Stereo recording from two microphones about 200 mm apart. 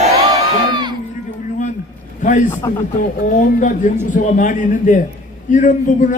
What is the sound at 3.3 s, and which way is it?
A man's voice, 40° left (ahead or behind).